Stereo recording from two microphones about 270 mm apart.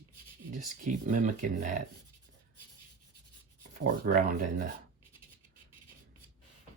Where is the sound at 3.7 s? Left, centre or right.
Right.